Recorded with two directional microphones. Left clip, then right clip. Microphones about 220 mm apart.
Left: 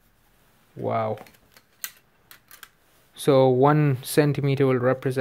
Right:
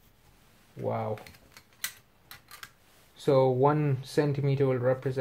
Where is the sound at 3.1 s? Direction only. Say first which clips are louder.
Left 6 dB; 45° left (ahead or behind).